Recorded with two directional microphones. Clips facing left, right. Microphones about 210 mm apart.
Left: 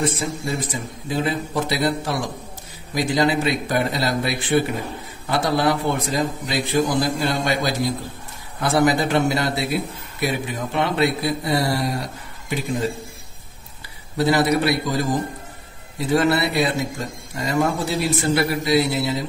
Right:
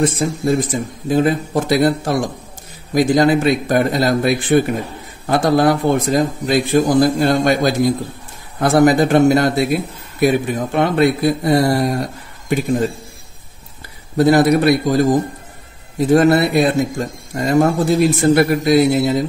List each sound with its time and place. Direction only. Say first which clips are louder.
0.0 s a man's voice: right 7 dB; 50° right (ahead or behind)
14.1 s a man's voice: right 6 dB; 50° right (ahead or behind)
16.1 s a man's voice: right 7 dB; 45° right (ahead or behind)